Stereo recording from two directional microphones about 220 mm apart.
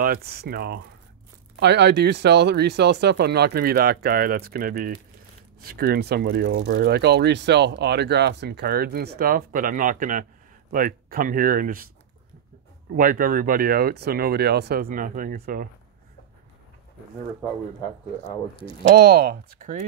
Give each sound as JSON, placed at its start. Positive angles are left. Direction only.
{"t": 0.0, "sound": "speech", "side_deg": -45}
{"t": 12.9, "sound": "speech", "side_deg": -40}
{"t": 18.2, "sound": "speech", "side_deg": 25}
{"t": 18.8, "sound": "speech", "side_deg": -50}